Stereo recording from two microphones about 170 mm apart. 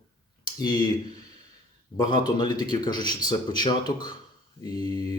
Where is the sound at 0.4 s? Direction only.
25° left (ahead or behind).